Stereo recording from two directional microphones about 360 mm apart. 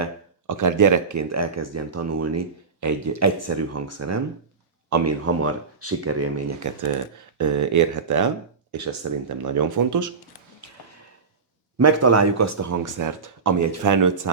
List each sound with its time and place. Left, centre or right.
0.0 s speech: right
11.8 s speech: right